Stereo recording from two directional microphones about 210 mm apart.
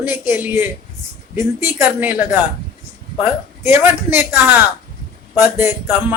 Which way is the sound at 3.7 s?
10° right (ahead or behind).